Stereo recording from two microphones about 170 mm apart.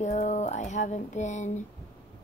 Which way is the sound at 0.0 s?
45° left (ahead or behind).